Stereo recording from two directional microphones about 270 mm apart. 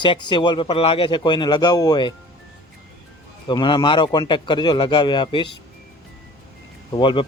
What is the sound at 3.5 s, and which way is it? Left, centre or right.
Speech, centre.